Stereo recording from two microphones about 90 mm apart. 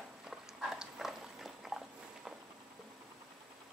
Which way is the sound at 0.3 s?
5° right (ahead or behind).